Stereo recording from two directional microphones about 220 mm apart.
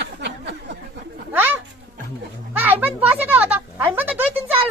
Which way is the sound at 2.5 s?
10° right (ahead or behind).